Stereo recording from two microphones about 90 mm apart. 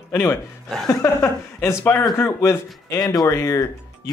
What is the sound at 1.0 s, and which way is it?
Speech, 30° left (ahead or behind).